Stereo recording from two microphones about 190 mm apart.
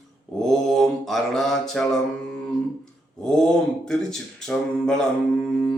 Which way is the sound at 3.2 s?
5° left (ahead or behind).